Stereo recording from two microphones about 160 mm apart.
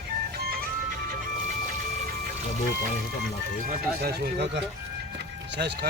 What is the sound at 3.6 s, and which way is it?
Speech, 75° right (ahead or behind).